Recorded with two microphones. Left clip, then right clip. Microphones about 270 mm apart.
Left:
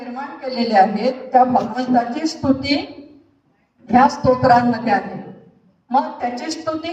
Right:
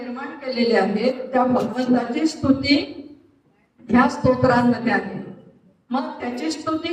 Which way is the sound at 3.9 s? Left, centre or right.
Left.